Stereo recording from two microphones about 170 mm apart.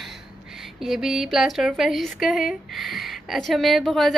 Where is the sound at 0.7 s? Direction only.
Centre (ahead or behind).